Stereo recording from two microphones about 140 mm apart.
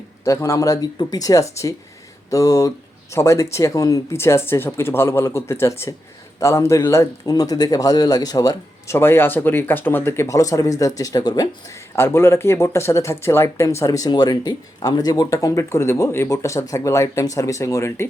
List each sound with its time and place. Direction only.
0.3 s speech: 20° left (ahead or behind)
11.9 s speech: 15° left (ahead or behind)